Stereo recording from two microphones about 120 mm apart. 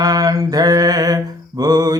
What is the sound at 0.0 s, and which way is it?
Mantra, 30° right (ahead or behind).